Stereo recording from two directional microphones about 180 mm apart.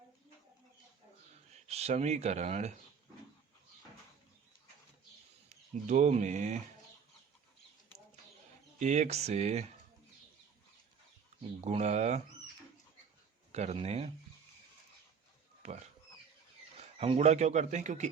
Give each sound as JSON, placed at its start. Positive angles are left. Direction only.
{"t": 1.7, "sound": "speech", "side_deg": -35}
{"t": 5.9, "sound": "speech", "side_deg": -40}
{"t": 8.8, "sound": "speech", "side_deg": -40}
{"t": 11.6, "sound": "speech", "side_deg": -40}
{"t": 13.5, "sound": "speech", "side_deg": -35}
{"t": 15.6, "sound": "speech", "side_deg": -40}